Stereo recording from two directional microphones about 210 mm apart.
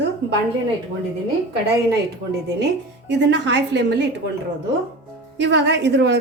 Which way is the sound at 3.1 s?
55° right (ahead or behind).